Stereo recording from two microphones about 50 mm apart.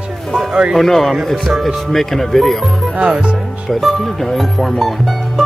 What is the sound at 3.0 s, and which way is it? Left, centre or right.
Speech, right.